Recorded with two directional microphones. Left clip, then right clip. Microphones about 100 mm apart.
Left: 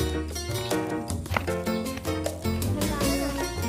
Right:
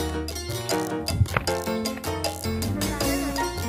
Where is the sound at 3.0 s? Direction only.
Centre (ahead or behind).